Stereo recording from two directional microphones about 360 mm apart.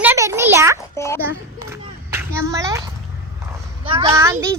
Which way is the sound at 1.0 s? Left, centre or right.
Centre.